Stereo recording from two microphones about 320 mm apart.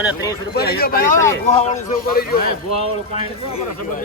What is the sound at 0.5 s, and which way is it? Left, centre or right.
Speech, left.